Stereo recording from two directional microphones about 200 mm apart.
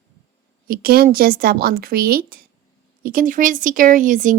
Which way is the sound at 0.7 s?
50° right (ahead or behind).